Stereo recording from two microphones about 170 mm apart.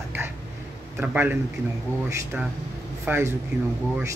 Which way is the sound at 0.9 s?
10° right (ahead or behind).